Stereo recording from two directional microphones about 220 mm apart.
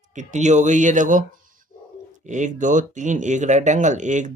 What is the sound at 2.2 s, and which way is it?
Speech, 35° right (ahead or behind).